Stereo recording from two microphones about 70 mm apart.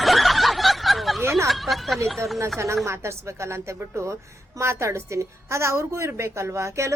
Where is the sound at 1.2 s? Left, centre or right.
Right.